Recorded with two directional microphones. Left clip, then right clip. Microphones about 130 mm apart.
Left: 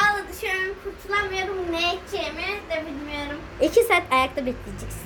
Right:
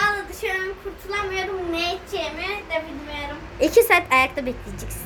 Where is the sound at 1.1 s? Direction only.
15° right (ahead or behind).